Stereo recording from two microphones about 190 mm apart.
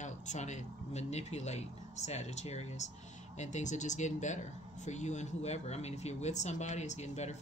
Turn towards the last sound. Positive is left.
turn(degrees=35)  # may be behind; listen again after turning